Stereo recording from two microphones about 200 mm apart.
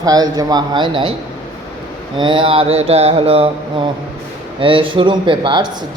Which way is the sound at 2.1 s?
25° right (ahead or behind).